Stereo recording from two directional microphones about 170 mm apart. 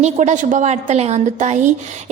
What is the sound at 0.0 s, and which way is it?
A woman's voice, 45° right (ahead or behind).